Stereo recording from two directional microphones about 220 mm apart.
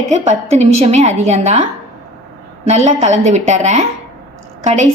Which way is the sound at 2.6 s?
30° right (ahead or behind).